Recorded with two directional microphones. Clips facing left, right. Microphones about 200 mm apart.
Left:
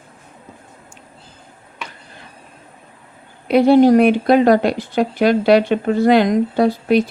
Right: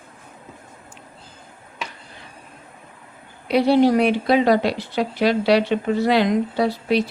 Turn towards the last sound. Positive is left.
turn(degrees=50)  # may be behind; listen again after turning